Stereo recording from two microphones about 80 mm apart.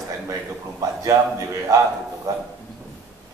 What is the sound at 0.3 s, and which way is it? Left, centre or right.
A man's voice, right.